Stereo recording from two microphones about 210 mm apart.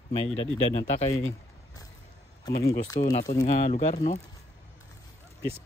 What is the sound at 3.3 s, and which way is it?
Speech, 35° left (ahead or behind).